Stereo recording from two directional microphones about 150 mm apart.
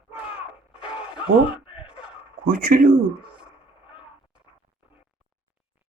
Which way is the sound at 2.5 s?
70° right (ahead or behind).